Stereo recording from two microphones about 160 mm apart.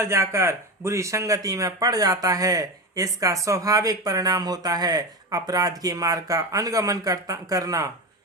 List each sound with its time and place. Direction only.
0.0 s speech: 15° right (ahead or behind)